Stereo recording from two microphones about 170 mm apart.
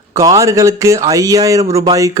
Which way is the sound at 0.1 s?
20° right (ahead or behind).